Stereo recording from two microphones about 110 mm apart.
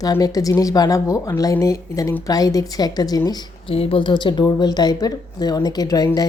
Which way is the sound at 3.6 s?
60° left (ahead or behind).